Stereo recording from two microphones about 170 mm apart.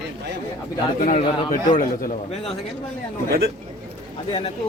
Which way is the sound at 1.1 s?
50° left (ahead or behind).